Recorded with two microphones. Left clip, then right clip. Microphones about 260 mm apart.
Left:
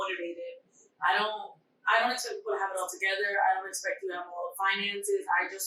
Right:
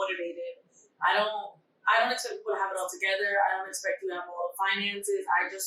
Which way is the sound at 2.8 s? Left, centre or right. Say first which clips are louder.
Right 1 dB; centre.